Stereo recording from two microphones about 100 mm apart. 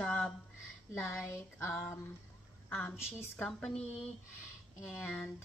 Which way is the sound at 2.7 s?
20° left (ahead or behind).